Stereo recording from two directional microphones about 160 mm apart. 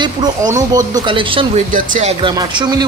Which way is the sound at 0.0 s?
25° right (ahead or behind).